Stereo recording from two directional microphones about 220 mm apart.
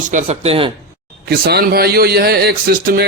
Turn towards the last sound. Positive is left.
turn(degrees=-45)  # may be behind; listen again after turning